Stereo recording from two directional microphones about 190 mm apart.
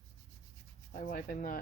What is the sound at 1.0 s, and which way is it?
Speech, 45° left (ahead or behind).